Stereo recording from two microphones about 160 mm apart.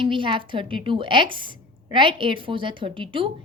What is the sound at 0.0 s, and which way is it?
A woman's voice, 30° right (ahead or behind).